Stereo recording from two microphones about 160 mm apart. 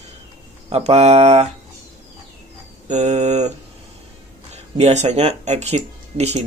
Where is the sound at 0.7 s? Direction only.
40° right (ahead or behind).